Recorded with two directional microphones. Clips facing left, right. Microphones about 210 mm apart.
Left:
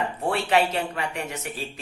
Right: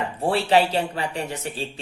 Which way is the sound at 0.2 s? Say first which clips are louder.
Right 4 dB; 30° right (ahead or behind).